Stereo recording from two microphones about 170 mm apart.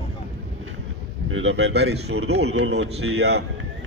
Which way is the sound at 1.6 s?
80° right.